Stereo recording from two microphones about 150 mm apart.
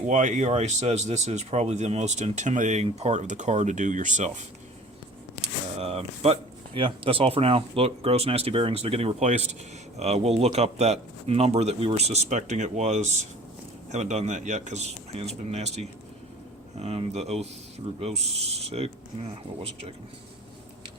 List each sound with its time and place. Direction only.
0.1 s speech: 55° right (ahead or behind)
5.4 s speech: 40° right (ahead or behind)